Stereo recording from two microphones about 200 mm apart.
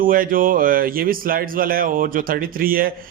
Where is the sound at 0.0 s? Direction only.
45° right (ahead or behind).